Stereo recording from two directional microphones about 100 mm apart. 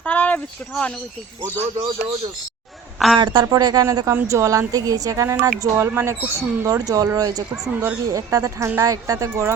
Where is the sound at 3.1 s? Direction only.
45° right (ahead or behind).